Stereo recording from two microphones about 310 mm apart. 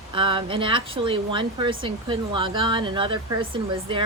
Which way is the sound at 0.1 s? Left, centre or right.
Centre.